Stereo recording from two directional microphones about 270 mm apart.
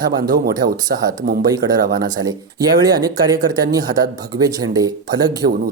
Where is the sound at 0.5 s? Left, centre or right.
Centre.